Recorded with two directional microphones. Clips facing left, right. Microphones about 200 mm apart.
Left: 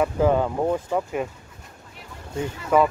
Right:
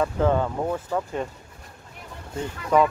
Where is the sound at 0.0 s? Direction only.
15° left (ahead or behind).